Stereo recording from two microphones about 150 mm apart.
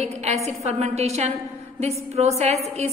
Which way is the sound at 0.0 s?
45° right (ahead or behind).